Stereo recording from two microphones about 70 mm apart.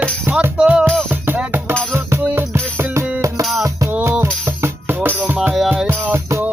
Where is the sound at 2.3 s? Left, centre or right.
Right.